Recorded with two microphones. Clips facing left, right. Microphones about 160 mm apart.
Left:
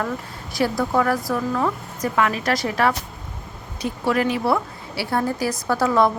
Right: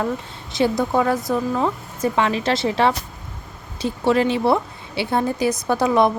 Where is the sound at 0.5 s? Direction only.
20° right (ahead or behind).